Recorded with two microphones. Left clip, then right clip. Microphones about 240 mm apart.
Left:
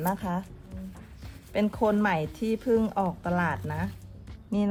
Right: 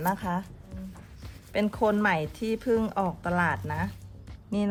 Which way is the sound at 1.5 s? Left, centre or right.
Right.